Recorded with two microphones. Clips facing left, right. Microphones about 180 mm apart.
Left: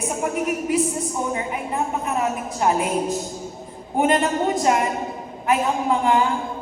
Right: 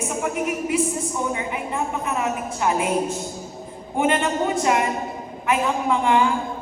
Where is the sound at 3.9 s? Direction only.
40° left (ahead or behind).